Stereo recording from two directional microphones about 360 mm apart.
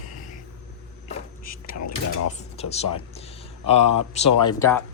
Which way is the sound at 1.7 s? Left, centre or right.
Left.